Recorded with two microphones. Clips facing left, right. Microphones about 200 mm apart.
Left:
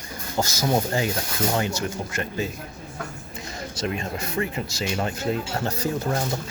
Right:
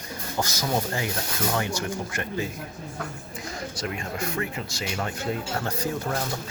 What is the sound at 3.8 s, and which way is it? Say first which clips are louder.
Speech: left 4 dB; 25° left (ahead or behind).